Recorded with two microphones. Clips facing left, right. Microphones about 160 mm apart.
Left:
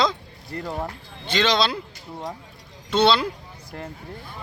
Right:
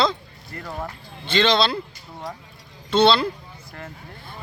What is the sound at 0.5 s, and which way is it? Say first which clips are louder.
Speech: left 4 dB; 30° left (ahead or behind).